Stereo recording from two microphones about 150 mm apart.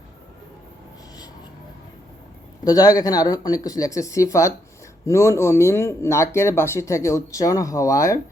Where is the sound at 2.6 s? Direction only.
25° left (ahead or behind).